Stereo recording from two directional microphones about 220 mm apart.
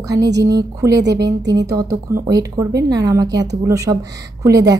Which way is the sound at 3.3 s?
50° right (ahead or behind).